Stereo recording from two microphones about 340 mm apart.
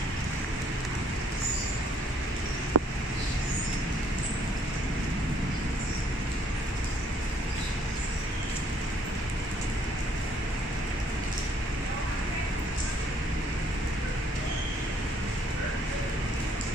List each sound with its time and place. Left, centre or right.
2.8 s vehicle: right